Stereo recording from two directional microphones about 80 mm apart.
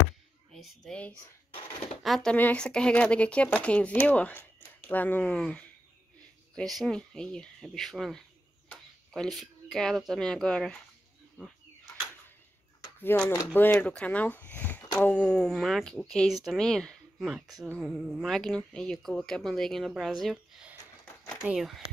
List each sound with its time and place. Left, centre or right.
0.5 s speech: centre
2.0 s speech: centre
2.3 s speech: left
2.6 s speech: centre
6.5 s speech: centre
13.1 s speech: left
15.3 s speech: centre
17.2 s speech: centre
18.7 s speech: centre